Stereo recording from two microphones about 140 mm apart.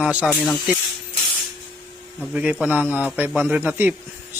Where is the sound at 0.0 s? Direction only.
10° right (ahead or behind).